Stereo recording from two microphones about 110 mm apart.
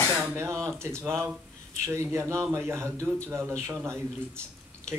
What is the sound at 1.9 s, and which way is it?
Speech, 25° right (ahead or behind).